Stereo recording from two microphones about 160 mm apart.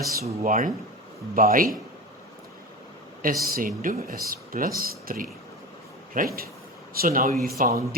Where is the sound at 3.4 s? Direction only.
65° right (ahead or behind).